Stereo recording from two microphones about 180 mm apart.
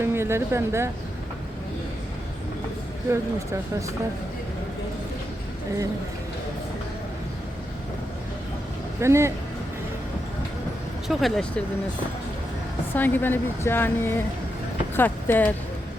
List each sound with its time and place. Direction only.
0.0 s speech: 15° right (ahead or behind)
9.0 s speech: 15° right (ahead or behind)
11.1 s speech: centre (ahead or behind)
12.9 s speech: 10° left (ahead or behind)